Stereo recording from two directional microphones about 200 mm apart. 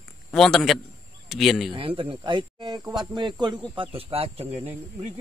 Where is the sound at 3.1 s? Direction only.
20° right (ahead or behind).